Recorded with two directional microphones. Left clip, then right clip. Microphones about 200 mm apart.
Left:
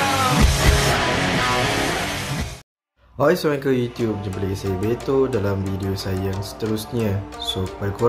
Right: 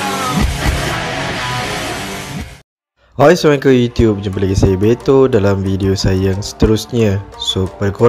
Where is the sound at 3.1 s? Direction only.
35° right (ahead or behind).